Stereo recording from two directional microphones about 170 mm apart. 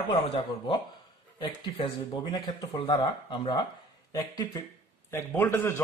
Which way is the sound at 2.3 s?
30° left (ahead or behind).